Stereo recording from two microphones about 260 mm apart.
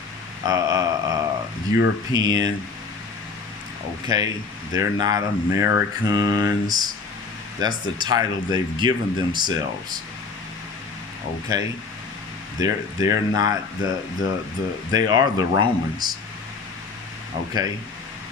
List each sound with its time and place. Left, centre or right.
0.4 s mantra: centre
2.1 s speech: centre
4.1 s speech: centre
11.5 s speech: centre
17.5 s speech: centre